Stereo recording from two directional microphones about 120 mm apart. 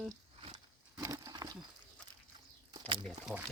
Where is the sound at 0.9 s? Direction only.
30° right (ahead or behind).